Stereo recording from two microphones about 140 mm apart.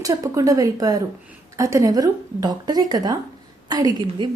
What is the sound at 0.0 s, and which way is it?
A woman's voice, 25° right (ahead or behind).